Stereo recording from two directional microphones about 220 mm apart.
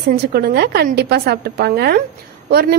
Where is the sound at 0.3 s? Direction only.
45° right (ahead or behind).